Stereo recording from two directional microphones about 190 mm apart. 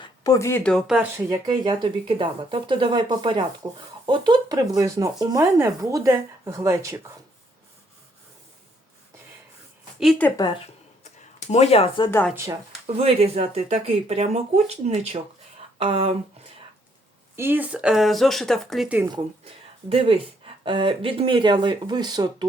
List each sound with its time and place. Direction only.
0.0 s speech: 15° left (ahead or behind); by 1.0 s centre (ahead or behind)
1.1 s speech: 20° right (ahead or behind)
10.0 s speech: centre (ahead or behind)
10.2 s speech: 20° left (ahead or behind)
11.0 s a sound: 35° left (ahead or behind)
12.3 s speech: 15° right (ahead or behind)
13.0 s speech: 35° right (ahead or behind)
17.3 s speech: 10° right (ahead or behind)
18.9 s speech: 20° right (ahead or behind)